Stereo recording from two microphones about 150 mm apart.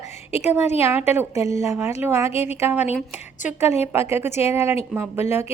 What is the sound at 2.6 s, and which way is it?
Speech, 10° right (ahead or behind).